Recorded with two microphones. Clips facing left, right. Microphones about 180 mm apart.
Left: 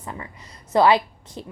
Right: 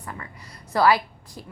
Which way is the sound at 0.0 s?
20° left (ahead or behind).